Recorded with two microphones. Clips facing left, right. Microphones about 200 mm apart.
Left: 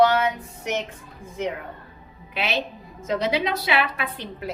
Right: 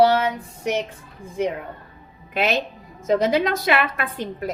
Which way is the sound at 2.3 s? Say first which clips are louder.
Right 5 dB; 45° right (ahead or behind).